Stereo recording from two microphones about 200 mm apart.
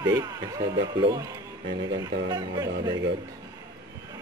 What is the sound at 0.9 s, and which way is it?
Mantra, 20° right (ahead or behind).